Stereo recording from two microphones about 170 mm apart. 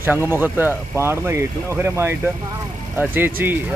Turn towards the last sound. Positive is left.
turn(degrees=-10)  # may be behind; listen again after turning